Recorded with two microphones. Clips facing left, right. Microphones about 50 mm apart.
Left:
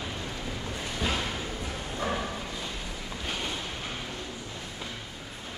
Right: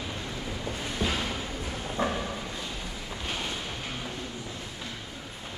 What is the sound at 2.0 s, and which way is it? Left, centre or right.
Bow-wow, right.